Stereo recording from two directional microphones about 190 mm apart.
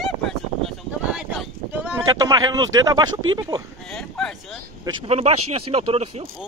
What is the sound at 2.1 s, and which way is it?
Speech, 20° right (ahead or behind).